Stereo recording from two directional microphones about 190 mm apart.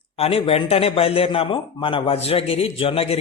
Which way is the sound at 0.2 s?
30° left (ahead or behind).